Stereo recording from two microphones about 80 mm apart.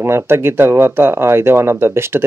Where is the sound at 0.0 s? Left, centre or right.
Right.